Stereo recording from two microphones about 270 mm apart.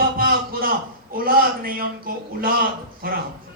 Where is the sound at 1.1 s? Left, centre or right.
Right.